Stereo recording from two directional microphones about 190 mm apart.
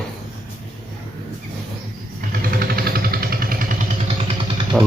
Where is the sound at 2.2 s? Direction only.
50° right (ahead or behind).